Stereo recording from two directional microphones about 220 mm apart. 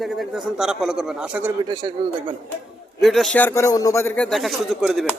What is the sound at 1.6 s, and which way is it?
Speech, 20° right (ahead or behind).